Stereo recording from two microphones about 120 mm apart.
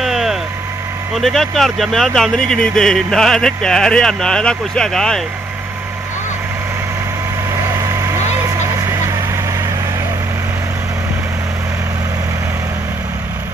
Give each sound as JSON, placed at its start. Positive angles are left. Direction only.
{"t": 0.0, "sound": "vehicle", "side_deg": 0}
{"t": 1.1, "sound": "speech", "side_deg": 0}
{"t": 7.8, "sound": "vehicle", "side_deg": -25}